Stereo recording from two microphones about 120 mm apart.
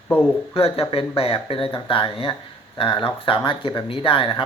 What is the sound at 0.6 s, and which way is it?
Speech, 55° left (ahead or behind).